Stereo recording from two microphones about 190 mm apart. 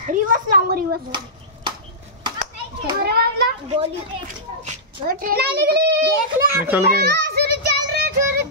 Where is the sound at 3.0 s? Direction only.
55° right (ahead or behind).